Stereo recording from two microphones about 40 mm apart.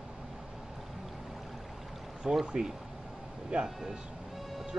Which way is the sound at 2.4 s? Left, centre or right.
Centre.